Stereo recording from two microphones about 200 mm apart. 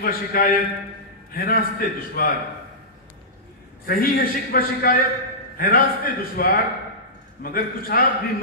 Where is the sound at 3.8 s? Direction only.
45° left (ahead or behind).